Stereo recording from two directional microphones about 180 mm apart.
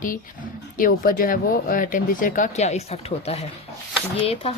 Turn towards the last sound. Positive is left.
turn(degrees=35)  # may be behind; listen again after turning